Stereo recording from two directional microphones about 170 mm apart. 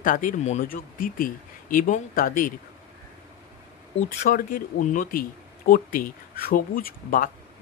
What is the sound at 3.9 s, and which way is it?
Speech, 55° left (ahead or behind).